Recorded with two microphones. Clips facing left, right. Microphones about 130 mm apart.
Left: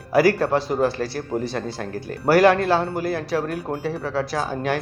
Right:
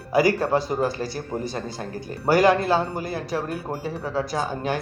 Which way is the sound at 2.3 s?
Centre (ahead or behind).